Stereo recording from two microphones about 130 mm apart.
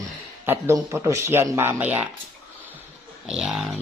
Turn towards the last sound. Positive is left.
turn(degrees=-5)  # may be behind; listen again after turning